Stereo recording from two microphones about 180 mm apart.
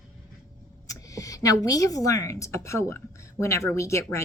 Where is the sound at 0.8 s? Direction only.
20° left (ahead or behind).